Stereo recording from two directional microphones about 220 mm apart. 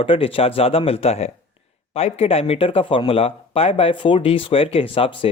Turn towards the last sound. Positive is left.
turn(degrees=25)  # may be behind; listen again after turning